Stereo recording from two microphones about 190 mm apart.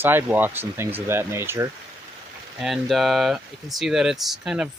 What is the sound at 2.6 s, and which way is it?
Speech, centre (ahead or behind).